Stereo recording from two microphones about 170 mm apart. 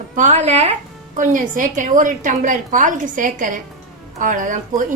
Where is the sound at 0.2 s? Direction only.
45° right (ahead or behind).